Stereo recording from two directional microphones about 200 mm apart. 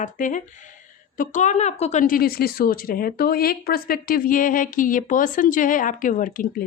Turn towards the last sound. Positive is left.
turn(degrees=40)  # may be behind; listen again after turning